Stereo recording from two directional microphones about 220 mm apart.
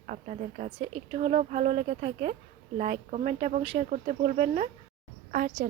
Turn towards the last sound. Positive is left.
turn(degrees=-35)  # may be behind; listen again after turning